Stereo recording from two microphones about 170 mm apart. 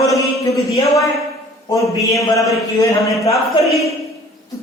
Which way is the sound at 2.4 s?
Centre (ahead or behind).